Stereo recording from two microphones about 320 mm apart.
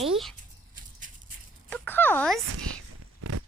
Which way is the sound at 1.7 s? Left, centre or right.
Centre.